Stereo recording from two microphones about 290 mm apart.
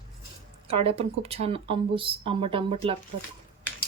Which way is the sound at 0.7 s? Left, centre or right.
Centre.